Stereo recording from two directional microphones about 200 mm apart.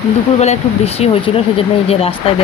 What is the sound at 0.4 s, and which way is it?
Speech, 30° left (ahead or behind).